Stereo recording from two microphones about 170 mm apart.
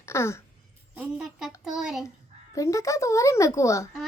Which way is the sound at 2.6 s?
20° left (ahead or behind).